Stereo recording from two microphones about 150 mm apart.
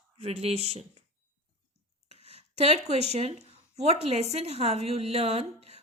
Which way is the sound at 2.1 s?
45° right (ahead or behind).